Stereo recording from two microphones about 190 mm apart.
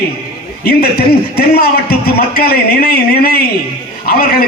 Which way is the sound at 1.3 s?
55° left (ahead or behind).